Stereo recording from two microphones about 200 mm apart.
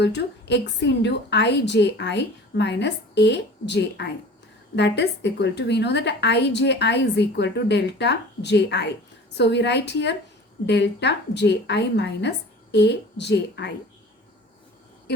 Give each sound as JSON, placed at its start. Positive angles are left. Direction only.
{"t": 0.0, "sound": "a woman's voice", "side_deg": 60}